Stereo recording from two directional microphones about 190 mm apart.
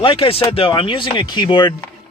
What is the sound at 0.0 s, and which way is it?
Speech, 25° left (ahead or behind).